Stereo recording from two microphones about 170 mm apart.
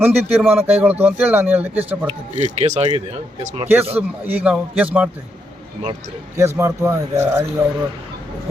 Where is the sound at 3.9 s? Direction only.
10° right (ahead or behind).